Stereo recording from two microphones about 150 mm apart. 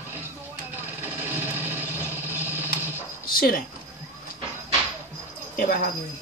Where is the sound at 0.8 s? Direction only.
15° right (ahead or behind).